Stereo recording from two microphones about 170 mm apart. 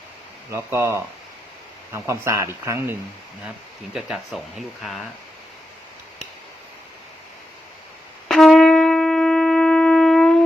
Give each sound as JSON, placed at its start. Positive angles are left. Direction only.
{"t": 0.5, "sound": "speech", "side_deg": -15}
{"t": 3.9, "sound": "speech", "side_deg": 0}
{"t": 8.3, "sound": "shofar", "side_deg": 0}